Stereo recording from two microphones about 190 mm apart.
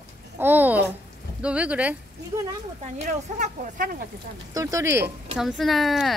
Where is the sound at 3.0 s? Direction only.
40° right (ahead or behind).